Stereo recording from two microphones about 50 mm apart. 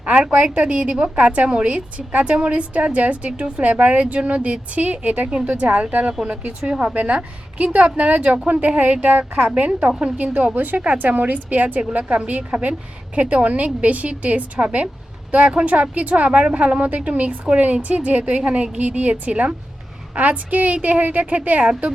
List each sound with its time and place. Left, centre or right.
0.4 s a woman's voice: right
10.5 s a woman's voice: right